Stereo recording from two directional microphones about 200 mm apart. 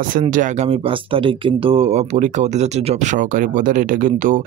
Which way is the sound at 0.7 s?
25° right (ahead or behind).